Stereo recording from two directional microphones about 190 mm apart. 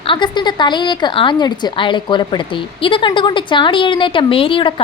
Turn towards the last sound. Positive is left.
turn(degrees=25)  # may be behind; listen again after turning